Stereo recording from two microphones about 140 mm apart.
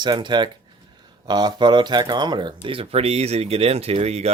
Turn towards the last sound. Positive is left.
turn(degrees=-50)  # may be behind; listen again after turning